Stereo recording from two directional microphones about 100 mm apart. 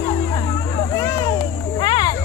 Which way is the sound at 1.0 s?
45° left (ahead or behind).